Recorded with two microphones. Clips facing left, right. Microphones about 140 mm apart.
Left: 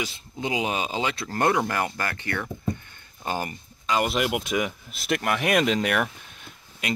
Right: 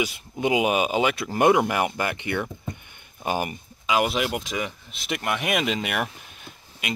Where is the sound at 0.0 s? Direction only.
15° right (ahead or behind).